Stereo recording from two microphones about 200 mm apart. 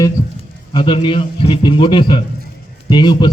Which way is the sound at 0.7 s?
25° left (ahead or behind).